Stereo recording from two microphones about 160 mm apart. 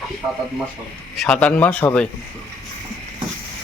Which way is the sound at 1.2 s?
10° left (ahead or behind).